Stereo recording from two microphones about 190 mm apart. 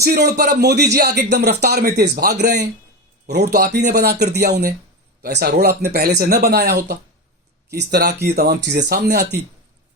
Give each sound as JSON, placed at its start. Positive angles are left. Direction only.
{"t": 0.0, "sound": "a man's voice", "side_deg": -55}